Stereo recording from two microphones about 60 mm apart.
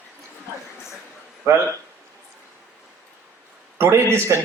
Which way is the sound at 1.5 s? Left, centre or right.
Right.